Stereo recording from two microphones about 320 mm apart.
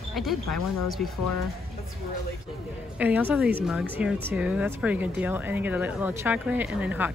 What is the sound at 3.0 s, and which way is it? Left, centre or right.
Speech, centre.